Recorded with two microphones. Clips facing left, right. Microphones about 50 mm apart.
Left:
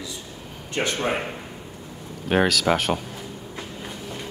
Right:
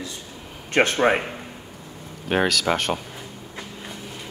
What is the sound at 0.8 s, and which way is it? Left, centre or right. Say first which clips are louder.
Speech: right 6 dB; right.